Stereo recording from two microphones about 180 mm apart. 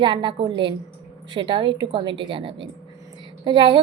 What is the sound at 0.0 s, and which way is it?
Speech, 25° right (ahead or behind).